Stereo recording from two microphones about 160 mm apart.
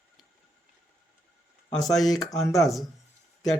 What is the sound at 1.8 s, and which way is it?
Speech, centre (ahead or behind).